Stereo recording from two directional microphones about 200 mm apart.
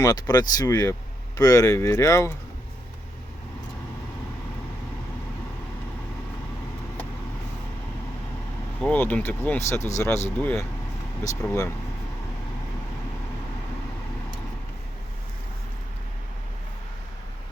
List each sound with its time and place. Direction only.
0.0 s speech: 20° left (ahead or behind)
8.8 s speech: 5° left (ahead or behind)